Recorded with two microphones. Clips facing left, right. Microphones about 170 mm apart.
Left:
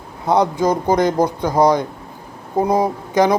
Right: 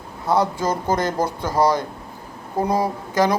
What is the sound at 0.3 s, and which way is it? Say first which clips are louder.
Speech: left 4 dB; 15° left (ahead or behind).